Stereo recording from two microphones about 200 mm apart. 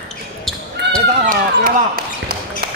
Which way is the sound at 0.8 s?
60° right (ahead or behind).